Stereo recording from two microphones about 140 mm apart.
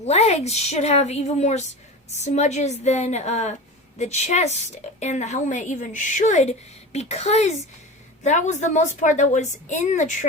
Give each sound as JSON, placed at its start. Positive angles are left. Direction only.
{"t": 0.0, "sound": "a woman's voice", "side_deg": 50}